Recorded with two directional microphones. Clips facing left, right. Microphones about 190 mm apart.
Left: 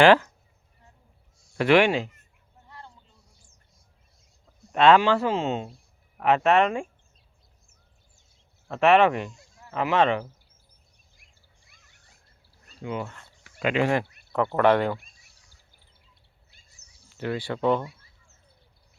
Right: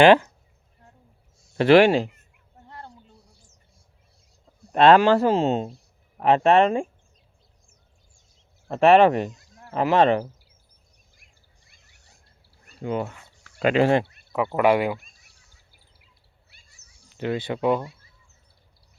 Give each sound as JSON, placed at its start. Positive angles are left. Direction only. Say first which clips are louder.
{"t": 0.0, "sound": "speech", "louder": "right 2 dB", "side_deg": -20}
{"t": 1.5, "sound": "speech", "louder": "right 5 dB", "side_deg": -35}
{"t": 2.6, "sound": "a sound", "louder": "right 5 dB", "side_deg": -60}
{"t": 4.7, "sound": "speech", "louder": "right 3 dB", "side_deg": -35}
{"t": 8.6, "sound": "speech", "louder": "right 4 dB", "side_deg": -35}
{"t": 12.8, "sound": "speech", "louder": "right 5 dB", "side_deg": -40}
{"t": 14.3, "sound": "speech", "louder": "right 1 dB", "side_deg": -10}
{"t": 17.1, "sound": "speech", "louder": "right 3 dB", "side_deg": -20}